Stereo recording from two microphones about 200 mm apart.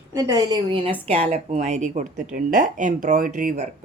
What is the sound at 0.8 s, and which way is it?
Speech, 30° right (ahead or behind).